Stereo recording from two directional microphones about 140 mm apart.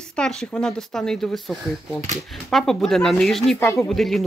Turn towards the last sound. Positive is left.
turn(degrees=0)  # may be behind; listen again after turning